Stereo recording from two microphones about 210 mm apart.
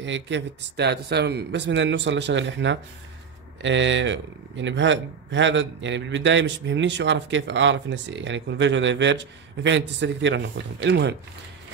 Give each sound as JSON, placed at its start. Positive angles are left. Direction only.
{"t": 0.0, "sound": "a man's voice", "side_deg": -60}